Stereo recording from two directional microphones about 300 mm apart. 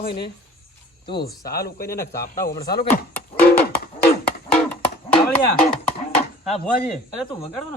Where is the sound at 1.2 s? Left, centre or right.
Left.